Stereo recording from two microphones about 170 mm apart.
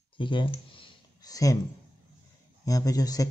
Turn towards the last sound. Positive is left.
turn(degrees=20)  # may be behind; listen again after turning